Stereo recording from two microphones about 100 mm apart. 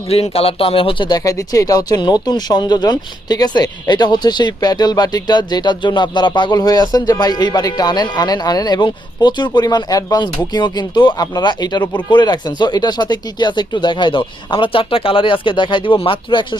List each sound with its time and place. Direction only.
0.1 s speech: 80° left; by 16.6 s 50° left (ahead or behind)